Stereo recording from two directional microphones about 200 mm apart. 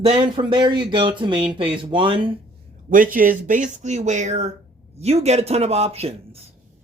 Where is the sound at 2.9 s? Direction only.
45° right (ahead or behind).